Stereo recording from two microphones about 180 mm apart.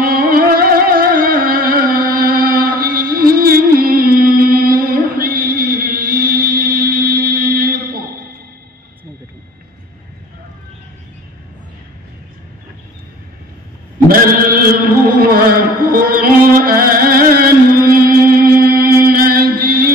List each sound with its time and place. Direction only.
0.0 s music: 55° right (ahead or behind)
14.0 s chant: 55° right (ahead or behind)